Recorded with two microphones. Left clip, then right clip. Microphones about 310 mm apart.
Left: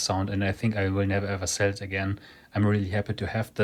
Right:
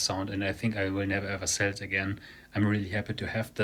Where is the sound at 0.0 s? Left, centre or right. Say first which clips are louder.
Left 3 dB; centre.